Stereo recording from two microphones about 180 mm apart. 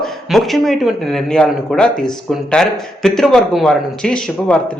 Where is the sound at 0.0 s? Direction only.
Centre (ahead or behind).